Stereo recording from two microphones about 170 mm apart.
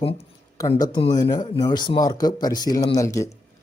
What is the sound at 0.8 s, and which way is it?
Speech, 25° left (ahead or behind).